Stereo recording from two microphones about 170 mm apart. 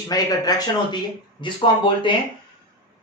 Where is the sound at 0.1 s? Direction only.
20° left (ahead or behind).